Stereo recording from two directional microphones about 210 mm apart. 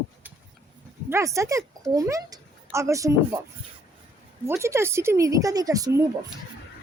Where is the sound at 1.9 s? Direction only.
15° right (ahead or behind).